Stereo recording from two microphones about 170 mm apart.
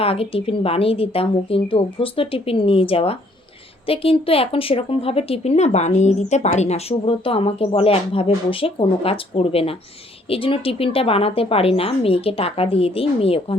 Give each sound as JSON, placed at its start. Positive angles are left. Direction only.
{"t": 0.0, "sound": "a woman's voice", "side_deg": 35}